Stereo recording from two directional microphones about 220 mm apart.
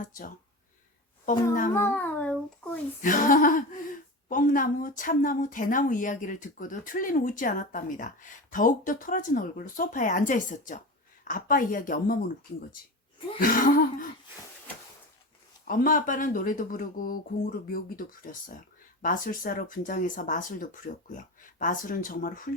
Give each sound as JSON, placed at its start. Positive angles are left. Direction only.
{"t": 0.0, "sound": "speech", "side_deg": 40}
{"t": 1.7, "sound": "music", "side_deg": 10}
{"t": 3.0, "sound": "speech", "side_deg": 35}
{"t": 13.4, "sound": "speech", "side_deg": 40}
{"t": 15.6, "sound": "speech", "side_deg": 40}